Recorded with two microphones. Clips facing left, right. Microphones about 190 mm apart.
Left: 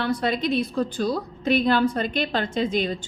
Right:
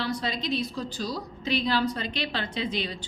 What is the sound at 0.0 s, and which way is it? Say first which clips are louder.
A woman's voice: left 6 dB; 55° left (ahead or behind).